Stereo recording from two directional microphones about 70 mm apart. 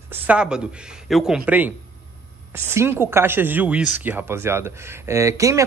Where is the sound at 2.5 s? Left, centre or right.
Right.